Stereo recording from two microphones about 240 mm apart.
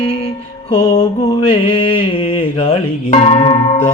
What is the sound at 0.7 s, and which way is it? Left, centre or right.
Mantra, centre.